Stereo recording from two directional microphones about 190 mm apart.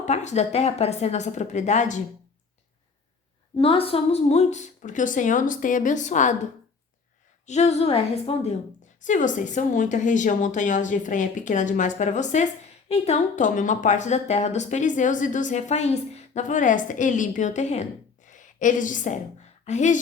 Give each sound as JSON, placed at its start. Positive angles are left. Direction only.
{"t": 0.0, "sound": "speech", "side_deg": 40}
{"t": 3.6, "sound": "a woman's voice", "side_deg": 30}